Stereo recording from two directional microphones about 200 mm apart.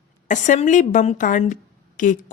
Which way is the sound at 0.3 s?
40° left (ahead or behind).